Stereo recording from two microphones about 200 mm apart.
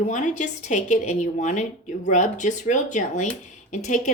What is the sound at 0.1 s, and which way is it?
Speech, 40° left (ahead or behind).